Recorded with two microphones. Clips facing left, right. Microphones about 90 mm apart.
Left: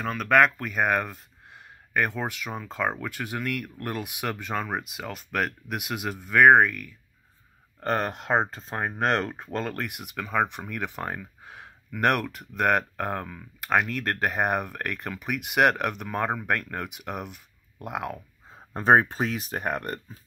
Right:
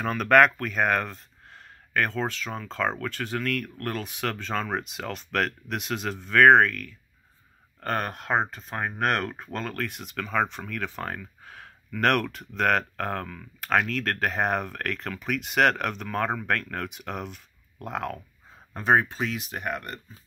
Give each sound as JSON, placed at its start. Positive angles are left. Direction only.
{"t": 0.0, "sound": "speech", "side_deg": 0}
{"t": 7.8, "sound": "speech", "side_deg": 25}
{"t": 18.5, "sound": "speech", "side_deg": 35}